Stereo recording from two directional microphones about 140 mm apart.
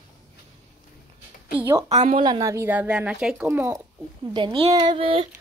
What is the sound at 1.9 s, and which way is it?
Speech, 50° right (ahead or behind).